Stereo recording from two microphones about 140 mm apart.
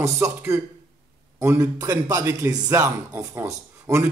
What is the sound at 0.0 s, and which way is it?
Speech, 20° right (ahead or behind).